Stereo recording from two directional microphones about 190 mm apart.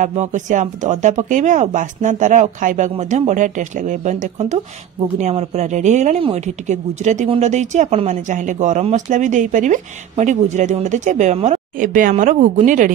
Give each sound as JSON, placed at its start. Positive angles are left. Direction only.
{"t": 0.0, "sound": "speech", "side_deg": -40}